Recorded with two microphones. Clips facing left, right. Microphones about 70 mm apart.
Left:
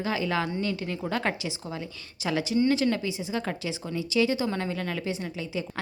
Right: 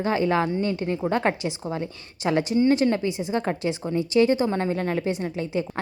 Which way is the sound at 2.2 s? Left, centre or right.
Right.